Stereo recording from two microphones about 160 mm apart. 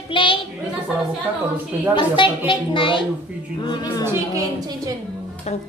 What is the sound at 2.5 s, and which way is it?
Speech, 30° left (ahead or behind).